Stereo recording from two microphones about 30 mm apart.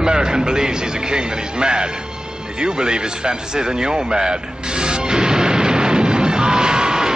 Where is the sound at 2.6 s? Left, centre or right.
Right.